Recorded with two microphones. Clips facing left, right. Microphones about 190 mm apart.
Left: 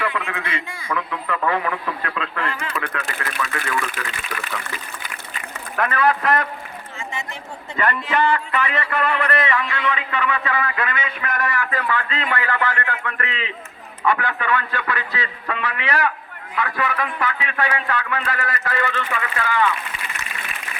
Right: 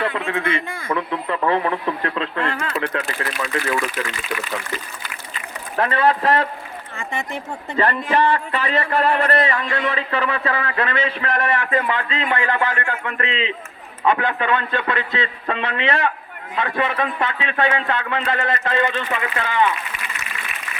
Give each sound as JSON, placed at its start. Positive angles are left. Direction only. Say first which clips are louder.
{"t": 0.0, "sound": "a man's voice", "louder": "right 4 dB", "side_deg": -35}
{"t": 5.7, "sound": "a man's voice", "louder": "right 2 dB", "side_deg": -30}
{"t": 6.9, "sound": "a man's voice", "louder": "right 4 dB", "side_deg": -55}
{"t": 7.8, "sound": "a man's voice", "louder": "right 2 dB", "side_deg": -30}